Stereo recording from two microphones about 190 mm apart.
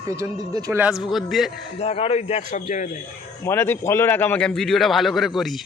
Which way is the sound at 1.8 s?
30° left (ahead or behind).